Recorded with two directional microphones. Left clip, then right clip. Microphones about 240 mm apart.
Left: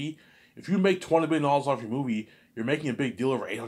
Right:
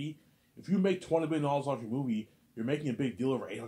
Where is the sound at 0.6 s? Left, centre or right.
Centre.